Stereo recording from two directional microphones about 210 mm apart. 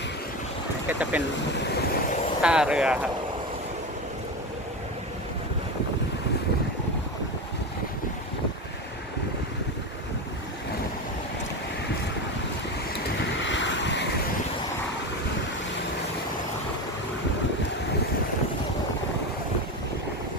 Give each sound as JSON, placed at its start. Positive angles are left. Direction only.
{"t": 0.9, "sound": "boat", "side_deg": -5}
{"t": 2.4, "sound": "speech", "side_deg": -5}
{"t": 13.5, "sound": "vehicle", "side_deg": 60}